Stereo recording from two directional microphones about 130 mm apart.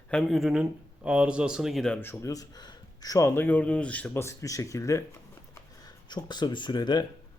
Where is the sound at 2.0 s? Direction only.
20° left (ahead or behind).